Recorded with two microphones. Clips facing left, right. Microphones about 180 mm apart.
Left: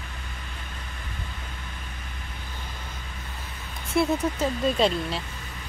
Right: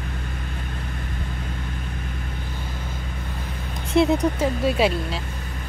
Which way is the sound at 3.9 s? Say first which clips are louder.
Right 5 dB; 15° right (ahead or behind).